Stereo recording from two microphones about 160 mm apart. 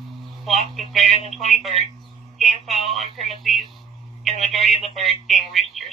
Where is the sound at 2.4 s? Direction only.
Centre (ahead or behind).